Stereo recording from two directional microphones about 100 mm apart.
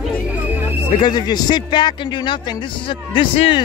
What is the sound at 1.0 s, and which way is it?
A man's voice, 45° left (ahead or behind).